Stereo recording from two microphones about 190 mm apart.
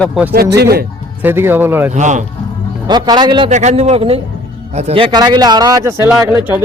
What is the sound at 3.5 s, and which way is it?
A man's voice, 40° right (ahead or behind).